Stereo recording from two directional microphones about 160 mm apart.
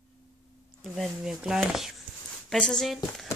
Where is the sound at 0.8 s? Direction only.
Centre (ahead or behind).